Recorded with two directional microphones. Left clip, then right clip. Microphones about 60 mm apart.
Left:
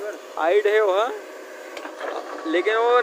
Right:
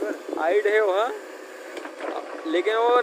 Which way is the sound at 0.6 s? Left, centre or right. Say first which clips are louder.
Left 1 dB; centre.